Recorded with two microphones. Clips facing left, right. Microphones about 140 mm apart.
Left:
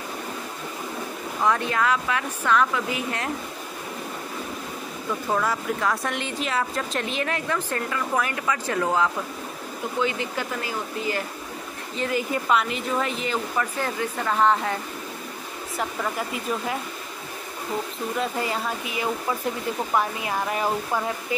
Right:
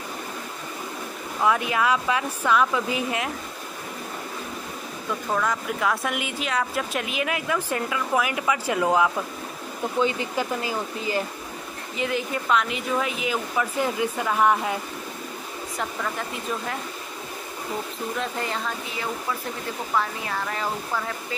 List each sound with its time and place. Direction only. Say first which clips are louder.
1.4 s speech: right 1 dB; 10° right (ahead or behind)
5.3 s speech: left 1 dB; 5° left (ahead or behind); by 11.2 s 20° right (ahead or behind)
12.0 s speech: left 1 dB; centre (ahead or behind)
15.8 s speech: left 2 dB; 10° left (ahead or behind)
18.2 s speech: left 3 dB; 5° left (ahead or behind)